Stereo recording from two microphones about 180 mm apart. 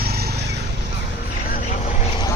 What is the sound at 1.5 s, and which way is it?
Vehicle, 50° left (ahead or behind).